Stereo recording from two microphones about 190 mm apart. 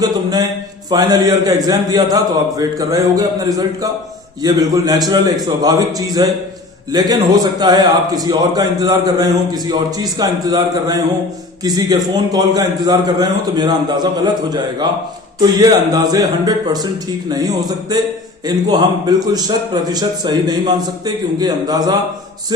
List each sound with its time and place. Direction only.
0.0 s a man's voice: 20° right (ahead or behind)
4.4 s a man's voice: 20° right (ahead or behind)
15.4 s a man's voice: 20° right (ahead or behind)